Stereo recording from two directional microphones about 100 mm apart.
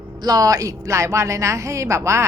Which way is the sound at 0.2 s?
40° right (ahead or behind).